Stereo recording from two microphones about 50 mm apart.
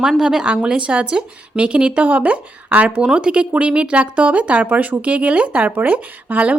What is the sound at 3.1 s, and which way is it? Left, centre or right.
Speech, centre.